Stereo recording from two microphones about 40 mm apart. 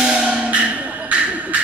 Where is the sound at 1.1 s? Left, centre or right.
Right.